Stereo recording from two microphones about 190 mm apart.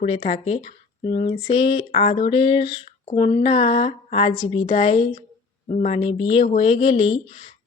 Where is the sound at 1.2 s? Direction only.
25° left (ahead or behind).